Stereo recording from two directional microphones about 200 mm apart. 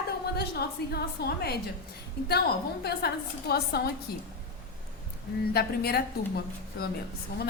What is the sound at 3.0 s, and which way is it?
Speech, 50° left (ahead or behind).